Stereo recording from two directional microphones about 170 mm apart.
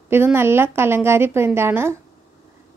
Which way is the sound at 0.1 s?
15° right (ahead or behind).